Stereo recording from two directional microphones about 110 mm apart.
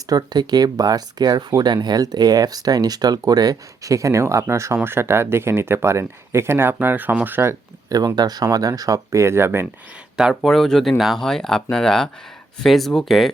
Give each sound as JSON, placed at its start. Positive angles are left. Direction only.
{"t": 0.1, "sound": "speech", "side_deg": -35}
{"t": 7.9, "sound": "speech", "side_deg": -35}
{"t": 10.2, "sound": "speech", "side_deg": 0}